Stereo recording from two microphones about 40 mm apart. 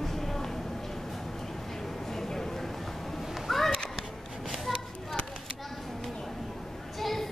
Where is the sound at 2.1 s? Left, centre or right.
Centre.